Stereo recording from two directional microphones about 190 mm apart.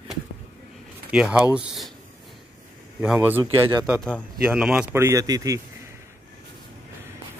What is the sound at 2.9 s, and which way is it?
A man's voice, 10° right (ahead or behind).